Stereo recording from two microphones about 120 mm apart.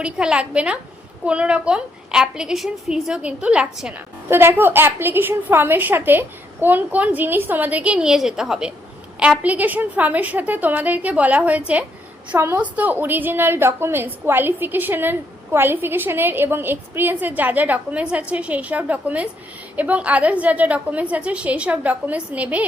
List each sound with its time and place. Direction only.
0.0 s a woman's voice: 10° right (ahead or behind)
4.3 s a woman's voice: 20° right (ahead or behind)